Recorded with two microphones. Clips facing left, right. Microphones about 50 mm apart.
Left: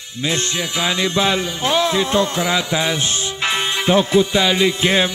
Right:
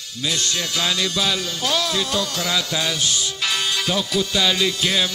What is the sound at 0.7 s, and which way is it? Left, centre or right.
Music, left.